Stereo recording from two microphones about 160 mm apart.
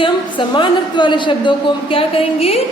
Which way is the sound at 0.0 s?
30° left (ahead or behind).